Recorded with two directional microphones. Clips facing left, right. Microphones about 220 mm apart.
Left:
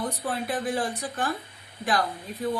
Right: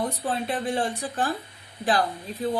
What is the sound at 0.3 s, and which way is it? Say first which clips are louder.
Speech: even; 25° right (ahead or behind).